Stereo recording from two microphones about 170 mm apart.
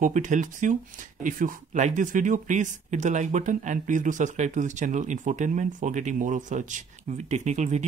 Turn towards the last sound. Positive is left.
turn(degrees=-45)  # may be behind; listen again after turning